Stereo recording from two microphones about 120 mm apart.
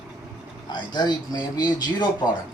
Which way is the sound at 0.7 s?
40° left (ahead or behind).